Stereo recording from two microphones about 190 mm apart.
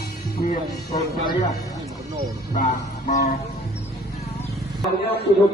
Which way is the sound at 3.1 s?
40° left (ahead or behind).